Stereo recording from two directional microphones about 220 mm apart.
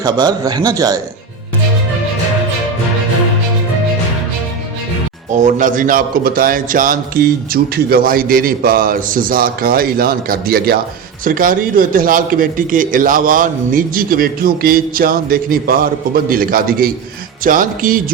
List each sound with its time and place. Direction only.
0.0 s a man's voice: 20° right (ahead or behind)
5.4 s a man's voice: 35° right (ahead or behind)